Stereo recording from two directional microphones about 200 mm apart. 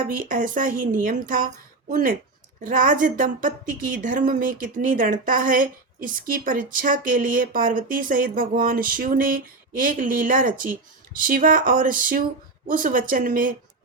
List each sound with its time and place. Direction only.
0.2 s speech: 40° right (ahead or behind)